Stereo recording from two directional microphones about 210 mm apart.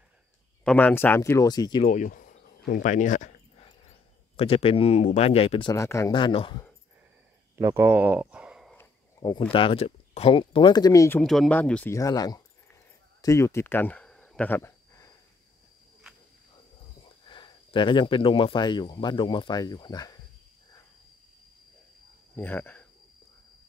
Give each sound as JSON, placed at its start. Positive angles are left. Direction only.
{"t": 0.7, "sound": "speech", "side_deg": 10}
{"t": 1.9, "sound": "a sound", "side_deg": 40}
{"t": 4.4, "sound": "speech", "side_deg": 25}
{"t": 5.8, "sound": "speech", "side_deg": 15}
{"t": 7.5, "sound": "speech", "side_deg": -10}
{"t": 8.7, "sound": "speech", "side_deg": 20}
{"t": 13.2, "sound": "a sound", "side_deg": 15}
{"t": 17.3, "sound": "speech", "side_deg": 20}
{"t": 22.3, "sound": "speech", "side_deg": 10}